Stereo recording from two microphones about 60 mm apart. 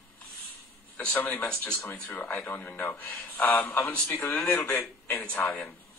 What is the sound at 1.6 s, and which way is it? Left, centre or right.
A man's voice, left.